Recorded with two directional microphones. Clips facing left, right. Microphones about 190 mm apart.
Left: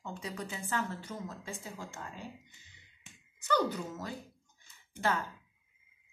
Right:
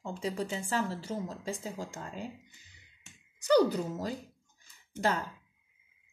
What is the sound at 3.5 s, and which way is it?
Speech, 35° right (ahead or behind).